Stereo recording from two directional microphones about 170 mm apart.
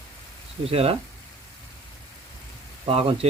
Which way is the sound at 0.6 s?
35° right (ahead or behind).